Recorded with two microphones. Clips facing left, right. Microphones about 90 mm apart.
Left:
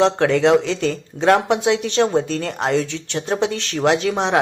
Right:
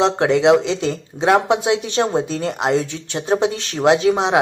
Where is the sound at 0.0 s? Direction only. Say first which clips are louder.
Right 1 dB; 15° right (ahead or behind).